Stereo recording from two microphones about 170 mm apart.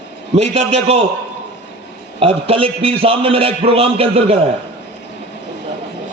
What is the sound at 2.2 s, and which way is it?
A man's voice, 35° right (ahead or behind).